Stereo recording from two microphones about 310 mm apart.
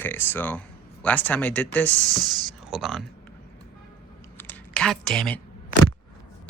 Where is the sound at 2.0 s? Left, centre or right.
Centre.